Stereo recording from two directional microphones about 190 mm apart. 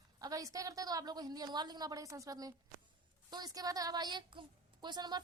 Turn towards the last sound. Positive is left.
turn(degrees=-20)  # may be behind; listen again after turning